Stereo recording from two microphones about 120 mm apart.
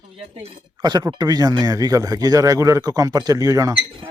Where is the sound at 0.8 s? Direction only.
35° right (ahead or behind).